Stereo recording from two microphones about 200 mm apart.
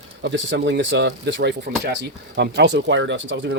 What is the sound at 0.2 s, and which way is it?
Speech, 65° right (ahead or behind).